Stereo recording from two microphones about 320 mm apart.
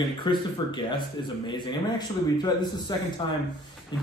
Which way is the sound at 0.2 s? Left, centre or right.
Centre.